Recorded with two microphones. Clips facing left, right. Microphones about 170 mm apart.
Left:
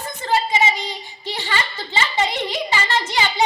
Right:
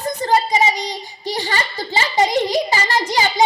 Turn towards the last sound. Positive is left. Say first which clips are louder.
# right 3 dB
turn(degrees=-40)  # may be behind; listen again after turning